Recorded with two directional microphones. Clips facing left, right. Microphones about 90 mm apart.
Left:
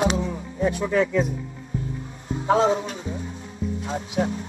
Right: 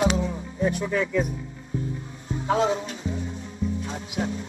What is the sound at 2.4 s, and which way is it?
Speech, 35° left (ahead or behind).